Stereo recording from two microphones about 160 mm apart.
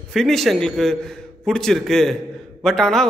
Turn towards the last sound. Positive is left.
turn(degrees=5)  # may be behind; listen again after turning